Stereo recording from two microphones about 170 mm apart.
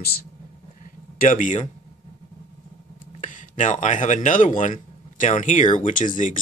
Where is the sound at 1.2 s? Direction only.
50° left (ahead or behind).